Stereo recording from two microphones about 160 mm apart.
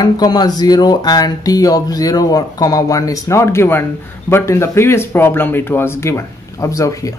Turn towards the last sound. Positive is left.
turn(degrees=20)  # may be behind; listen again after turning